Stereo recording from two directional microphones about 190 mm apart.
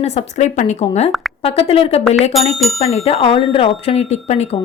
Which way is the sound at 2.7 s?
30° left (ahead or behind).